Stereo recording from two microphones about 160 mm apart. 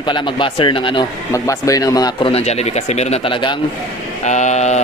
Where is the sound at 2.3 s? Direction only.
40° left (ahead or behind).